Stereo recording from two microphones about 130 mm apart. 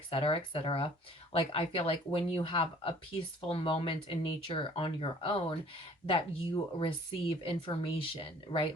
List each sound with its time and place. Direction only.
0.1 s speech: 45° left (ahead or behind)